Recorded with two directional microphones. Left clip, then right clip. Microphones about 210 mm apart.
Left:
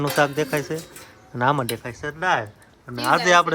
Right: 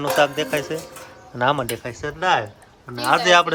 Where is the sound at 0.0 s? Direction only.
Centre (ahead or behind).